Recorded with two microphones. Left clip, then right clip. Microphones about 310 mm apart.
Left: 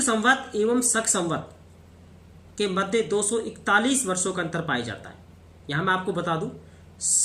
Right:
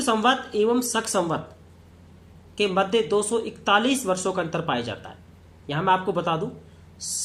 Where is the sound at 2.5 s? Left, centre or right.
Centre.